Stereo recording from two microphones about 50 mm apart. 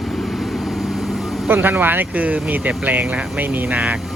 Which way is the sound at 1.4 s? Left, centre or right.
Right.